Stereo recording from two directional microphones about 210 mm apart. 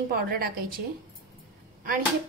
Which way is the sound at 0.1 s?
45° right (ahead or behind).